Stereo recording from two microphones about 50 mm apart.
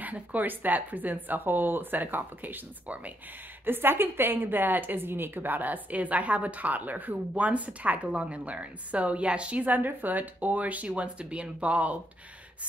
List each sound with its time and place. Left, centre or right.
0.0 s a woman's voice: right
3.6 s a woman's voice: right